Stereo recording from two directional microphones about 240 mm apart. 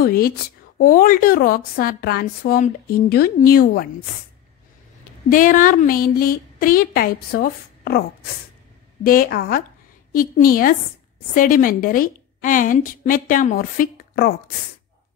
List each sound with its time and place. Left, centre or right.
0.0 s a woman's voice: left
5.3 s a woman's voice: left
9.0 s a woman's voice: left